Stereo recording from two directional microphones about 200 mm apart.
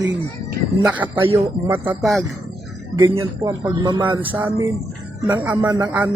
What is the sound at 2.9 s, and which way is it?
A man's voice, 20° right (ahead or behind).